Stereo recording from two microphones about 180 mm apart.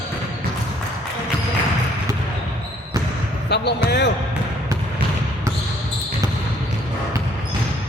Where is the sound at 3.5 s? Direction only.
70° left (ahead or behind).